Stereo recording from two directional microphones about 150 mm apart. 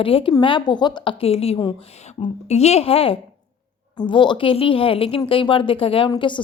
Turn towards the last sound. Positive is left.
turn(degrees=30)  # may be behind; listen again after turning